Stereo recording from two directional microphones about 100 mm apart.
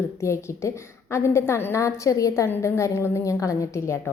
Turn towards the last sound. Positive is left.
turn(degrees=30)  # may be behind; listen again after turning